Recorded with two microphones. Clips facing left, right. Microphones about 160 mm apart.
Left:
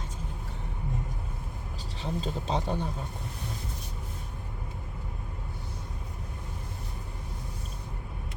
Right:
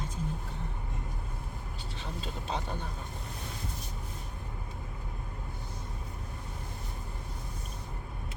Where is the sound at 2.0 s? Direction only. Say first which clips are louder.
Left 8 dB; 35° left (ahead or behind).